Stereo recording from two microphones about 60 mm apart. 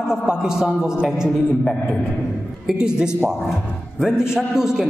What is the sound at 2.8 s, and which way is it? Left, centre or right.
A man's voice, centre.